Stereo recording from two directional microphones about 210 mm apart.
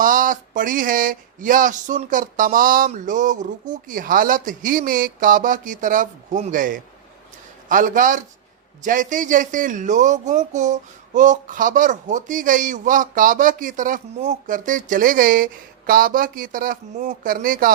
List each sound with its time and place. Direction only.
0.0 s speech: 40° right (ahead or behind)